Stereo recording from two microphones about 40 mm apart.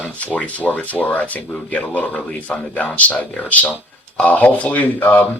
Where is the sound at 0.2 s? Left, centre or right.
Left.